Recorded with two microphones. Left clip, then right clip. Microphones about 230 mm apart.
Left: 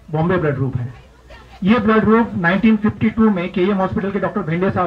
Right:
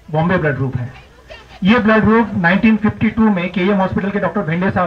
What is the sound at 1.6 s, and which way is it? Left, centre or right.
A man's voice, right.